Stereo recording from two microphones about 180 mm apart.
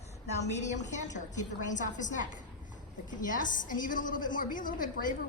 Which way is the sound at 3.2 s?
50° left (ahead or behind).